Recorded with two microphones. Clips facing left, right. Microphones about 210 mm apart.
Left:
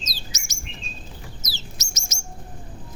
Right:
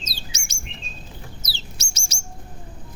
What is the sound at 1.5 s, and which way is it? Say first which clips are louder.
Bird: left 1 dB; 30° right (ahead or behind).